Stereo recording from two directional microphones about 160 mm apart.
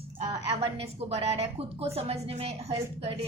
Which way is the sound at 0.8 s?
40° right (ahead or behind).